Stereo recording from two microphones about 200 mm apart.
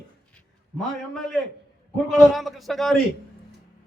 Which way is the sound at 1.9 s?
Centre (ahead or behind).